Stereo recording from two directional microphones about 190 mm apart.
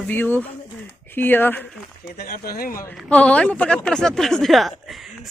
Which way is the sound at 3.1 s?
5° left (ahead or behind).